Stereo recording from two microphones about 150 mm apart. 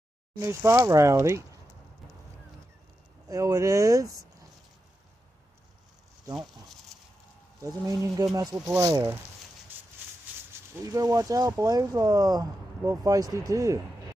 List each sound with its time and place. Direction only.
0.4 s speech: 15° right (ahead or behind)
3.3 s speech: 25° right (ahead or behind)
7.6 s speech: 25° right (ahead or behind)
10.7 s speech: 20° right (ahead or behind)